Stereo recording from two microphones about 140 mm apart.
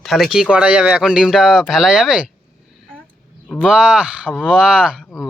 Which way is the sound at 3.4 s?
10° left (ahead or behind).